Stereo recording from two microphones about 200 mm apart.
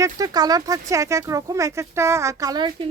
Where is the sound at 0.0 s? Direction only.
20° right (ahead or behind).